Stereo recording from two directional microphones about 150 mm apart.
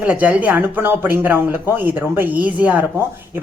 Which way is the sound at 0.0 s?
10° right (ahead or behind).